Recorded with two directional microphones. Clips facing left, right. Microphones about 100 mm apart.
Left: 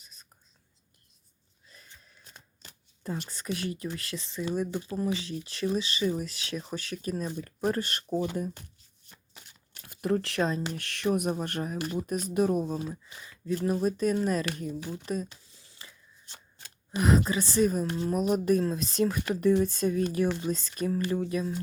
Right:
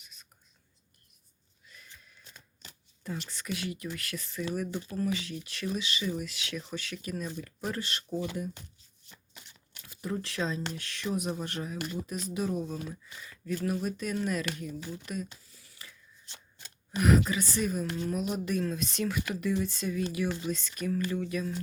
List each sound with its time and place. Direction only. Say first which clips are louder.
1.6 s horse: right 1 dB; 35° left (ahead or behind)
3.2 s speech: left 2 dB; 40° left (ahead or behind)
9.8 s speech: left 7 dB; 55° left (ahead or behind)
12.9 s speech: left 3 dB; 25° left (ahead or behind)
15.0 s a sound: left 5 dB; 35° left (ahead or behind)
17.0 s speech: left 1 dB; 30° left (ahead or behind)